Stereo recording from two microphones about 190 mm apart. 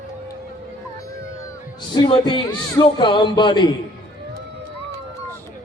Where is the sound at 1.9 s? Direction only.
25° left (ahead or behind).